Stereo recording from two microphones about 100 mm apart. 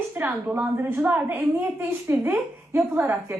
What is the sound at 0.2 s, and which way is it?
A woman's voice, 15° right (ahead or behind).